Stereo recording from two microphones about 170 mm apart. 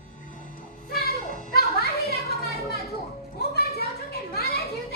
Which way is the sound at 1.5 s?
70° left (ahead or behind).